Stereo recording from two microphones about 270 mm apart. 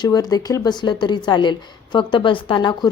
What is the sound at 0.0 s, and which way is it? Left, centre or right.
A woman's voice, centre.